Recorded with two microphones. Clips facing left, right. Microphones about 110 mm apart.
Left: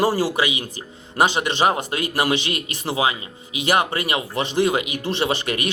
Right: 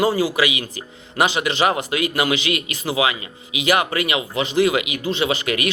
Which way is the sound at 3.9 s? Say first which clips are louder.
Right 2 dB; 45° left (ahead or behind).